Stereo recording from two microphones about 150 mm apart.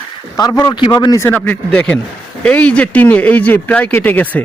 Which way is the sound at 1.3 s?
10° left (ahead or behind).